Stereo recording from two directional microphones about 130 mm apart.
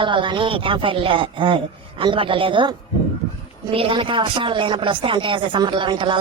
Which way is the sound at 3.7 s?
45° right (ahead or behind).